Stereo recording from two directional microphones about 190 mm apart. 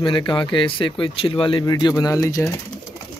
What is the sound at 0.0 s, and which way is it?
Speech, 25° left (ahead or behind).